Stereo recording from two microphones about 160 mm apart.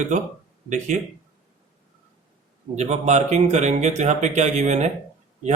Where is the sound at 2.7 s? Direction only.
45° right (ahead or behind).